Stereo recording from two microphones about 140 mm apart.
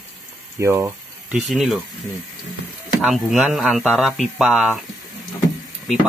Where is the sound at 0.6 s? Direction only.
20° right (ahead or behind).